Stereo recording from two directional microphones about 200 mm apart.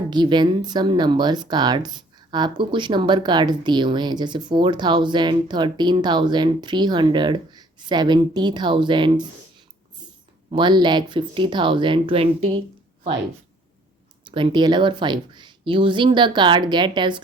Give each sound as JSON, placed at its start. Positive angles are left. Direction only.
{"t": 0.1, "sound": "speech", "side_deg": -20}
{"t": 14.3, "sound": "speech", "side_deg": -25}